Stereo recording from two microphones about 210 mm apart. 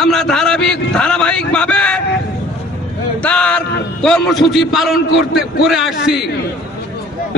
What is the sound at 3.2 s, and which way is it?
A man's voice, 5° left (ahead or behind).